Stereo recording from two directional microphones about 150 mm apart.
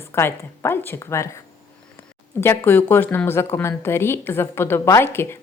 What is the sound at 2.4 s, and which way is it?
A woman's voice, 15° left (ahead or behind).